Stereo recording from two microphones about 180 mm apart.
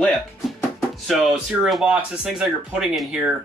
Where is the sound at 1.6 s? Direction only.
5° right (ahead or behind).